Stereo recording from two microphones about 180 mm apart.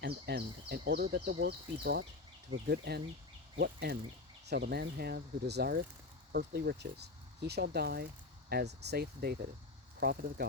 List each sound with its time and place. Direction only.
0.0 s speech: 60° right (ahead or behind)